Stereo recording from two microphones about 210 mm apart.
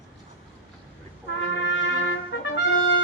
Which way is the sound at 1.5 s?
60° left (ahead or behind).